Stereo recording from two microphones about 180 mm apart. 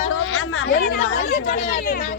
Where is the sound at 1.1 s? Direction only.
55° left (ahead or behind).